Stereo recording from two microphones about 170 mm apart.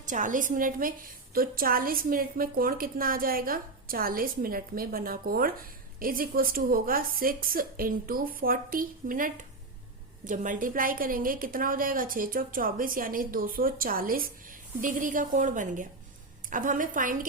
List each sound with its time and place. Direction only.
0.0 s a woman's voice: 50° right (ahead or behind)